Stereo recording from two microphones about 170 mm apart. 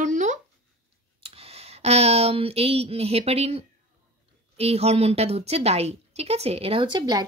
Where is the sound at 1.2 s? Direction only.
35° right (ahead or behind).